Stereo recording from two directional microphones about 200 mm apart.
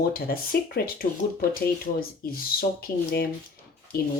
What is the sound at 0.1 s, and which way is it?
Speech, 50° left (ahead or behind).